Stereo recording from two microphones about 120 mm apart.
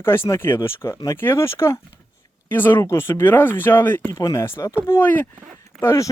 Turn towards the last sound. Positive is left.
turn(degrees=25)  # may be behind; listen again after turning